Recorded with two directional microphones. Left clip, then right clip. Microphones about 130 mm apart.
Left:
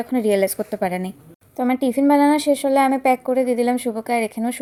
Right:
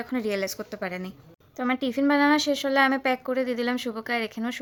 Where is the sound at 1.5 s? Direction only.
30° left (ahead or behind).